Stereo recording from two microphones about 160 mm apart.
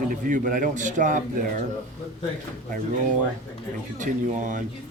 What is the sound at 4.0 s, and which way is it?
Speech, 55° right (ahead or behind).